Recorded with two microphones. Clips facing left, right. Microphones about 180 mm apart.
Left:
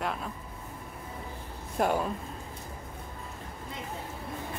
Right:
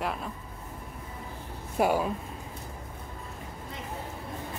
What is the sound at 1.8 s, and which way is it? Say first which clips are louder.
Speech: right 2 dB; 5° right (ahead or behind).